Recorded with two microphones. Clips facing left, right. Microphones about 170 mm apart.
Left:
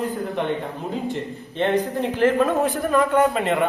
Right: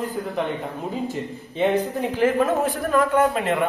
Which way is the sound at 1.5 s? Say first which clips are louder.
Even; 10° right (ahead or behind).